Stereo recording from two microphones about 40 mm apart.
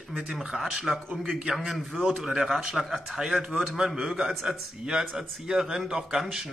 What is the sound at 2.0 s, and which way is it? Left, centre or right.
A man's voice, centre.